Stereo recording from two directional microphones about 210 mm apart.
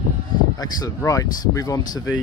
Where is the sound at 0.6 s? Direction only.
15° left (ahead or behind).